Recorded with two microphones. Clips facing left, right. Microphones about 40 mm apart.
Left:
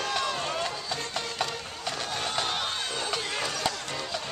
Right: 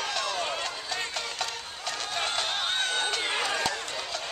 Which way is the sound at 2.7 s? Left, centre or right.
Right.